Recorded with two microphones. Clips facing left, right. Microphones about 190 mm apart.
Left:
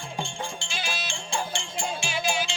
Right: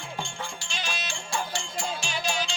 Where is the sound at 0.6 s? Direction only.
5° left (ahead or behind).